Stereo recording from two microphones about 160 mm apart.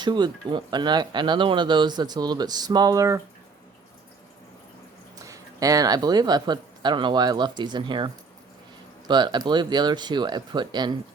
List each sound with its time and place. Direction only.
0.0 s speech: 30° right (ahead or behind)
5.2 s speech: 20° right (ahead or behind)